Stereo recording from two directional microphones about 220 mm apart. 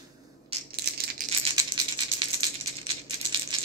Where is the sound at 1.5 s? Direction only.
20° right (ahead or behind).